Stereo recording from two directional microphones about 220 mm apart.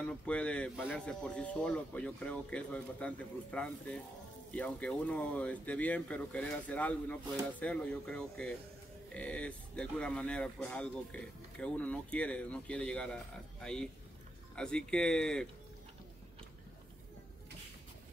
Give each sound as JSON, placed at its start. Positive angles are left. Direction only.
{"t": 0.0, "sound": "speech", "side_deg": 5}